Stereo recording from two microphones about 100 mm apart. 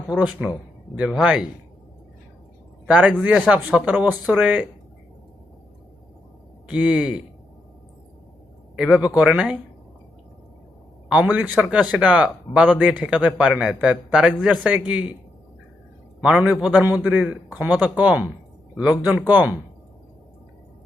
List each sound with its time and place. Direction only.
0.1 s a man's voice: 10° right (ahead or behind)
2.8 s a man's voice: 10° right (ahead or behind)
6.7 s a man's voice: 10° right (ahead or behind)
8.7 s a man's voice: 10° right (ahead or behind)
11.1 s a man's voice: 15° right (ahead or behind)
16.2 s a man's voice: 10° right (ahead or behind)